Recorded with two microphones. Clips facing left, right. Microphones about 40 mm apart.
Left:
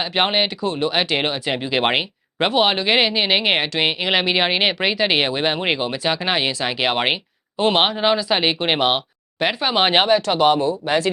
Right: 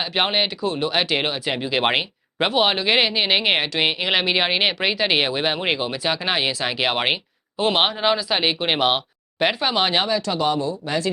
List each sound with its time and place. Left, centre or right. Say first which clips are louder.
0.0 s speech: left 2 dB; centre
9.7 s speech: left 4 dB; left
10.8 s speech: left 5 dB; left